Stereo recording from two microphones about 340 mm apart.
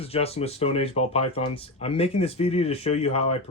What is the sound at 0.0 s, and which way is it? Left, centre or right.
Speech, centre.